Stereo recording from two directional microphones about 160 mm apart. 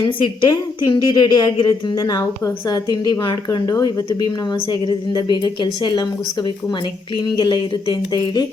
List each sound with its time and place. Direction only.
0.0 s a woman's voice: 30° left (ahead or behind)
7.3 s a woman's voice: 30° left (ahead or behind)